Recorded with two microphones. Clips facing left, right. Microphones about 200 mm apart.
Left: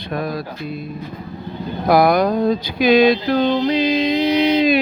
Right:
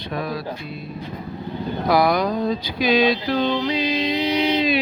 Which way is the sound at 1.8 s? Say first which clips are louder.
Left 5 dB; 50° left (ahead or behind).